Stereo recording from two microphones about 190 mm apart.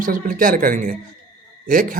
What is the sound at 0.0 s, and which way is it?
Speech, 45° right (ahead or behind).